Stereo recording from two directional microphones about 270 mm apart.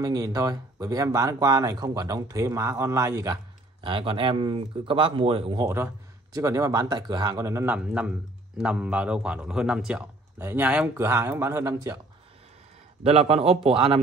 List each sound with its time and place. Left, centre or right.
0.0 s a man's voice: centre
13.0 s speech: right